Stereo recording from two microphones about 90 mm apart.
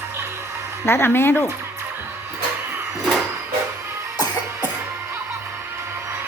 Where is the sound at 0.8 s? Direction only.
25° left (ahead or behind).